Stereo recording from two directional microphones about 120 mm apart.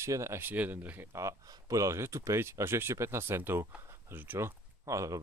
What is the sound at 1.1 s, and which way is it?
Speech, 25° right (ahead or behind).